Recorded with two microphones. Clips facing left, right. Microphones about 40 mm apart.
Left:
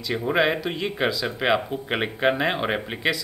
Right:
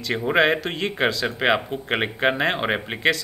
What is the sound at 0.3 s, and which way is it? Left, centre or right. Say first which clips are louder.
Speech: right 3 dB; right.